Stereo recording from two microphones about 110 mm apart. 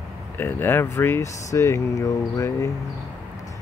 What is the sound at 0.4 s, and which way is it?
Speech, 20° left (ahead or behind).